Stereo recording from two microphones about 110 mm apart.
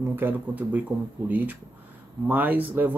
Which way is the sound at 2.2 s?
15° right (ahead or behind).